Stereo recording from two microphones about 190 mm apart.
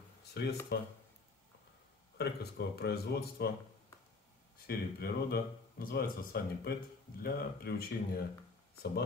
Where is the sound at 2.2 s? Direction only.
60° left (ahead or behind).